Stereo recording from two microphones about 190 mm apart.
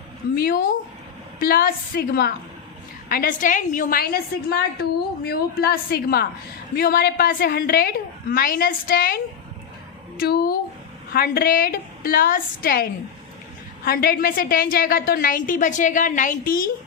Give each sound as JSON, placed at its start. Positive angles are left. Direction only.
{"t": 0.3, "sound": "a woman's voice", "side_deg": 50}
{"t": 10.2, "sound": "a woman's voice", "side_deg": 55}